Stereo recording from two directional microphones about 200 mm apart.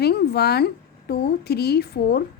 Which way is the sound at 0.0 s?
55° left (ahead or behind).